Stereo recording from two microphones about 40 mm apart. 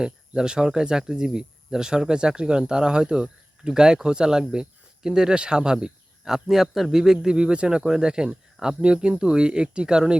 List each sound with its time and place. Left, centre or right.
0.0 s a man's voice: centre
7.3 s speech: right